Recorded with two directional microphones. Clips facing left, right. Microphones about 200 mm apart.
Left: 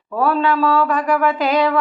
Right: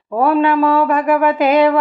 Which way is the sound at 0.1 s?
20° right (ahead or behind).